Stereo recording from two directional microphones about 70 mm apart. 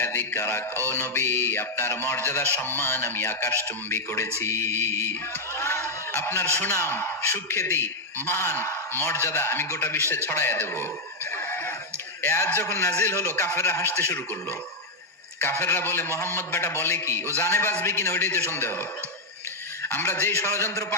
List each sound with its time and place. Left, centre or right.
0.0 s music: left
0.9 s a man's voice: left
5.5 s a sound: left
6.5 s a man's voice: left
12.2 s a man's voice: left
15.4 s a man's voice: left
19.8 s a man's voice: left